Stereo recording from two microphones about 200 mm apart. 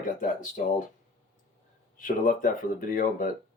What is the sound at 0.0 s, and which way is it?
Speech, 40° left (ahead or behind).